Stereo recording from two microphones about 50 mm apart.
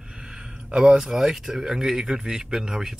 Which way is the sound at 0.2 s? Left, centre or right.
Centre.